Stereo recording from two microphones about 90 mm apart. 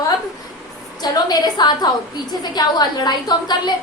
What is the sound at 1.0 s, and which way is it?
A woman's voice, 50° left (ahead or behind).